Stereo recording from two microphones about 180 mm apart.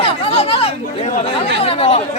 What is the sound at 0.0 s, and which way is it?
Chatter, 35° left (ahead or behind).